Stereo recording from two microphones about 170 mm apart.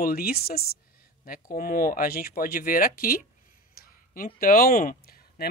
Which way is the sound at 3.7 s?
55° left (ahead or behind).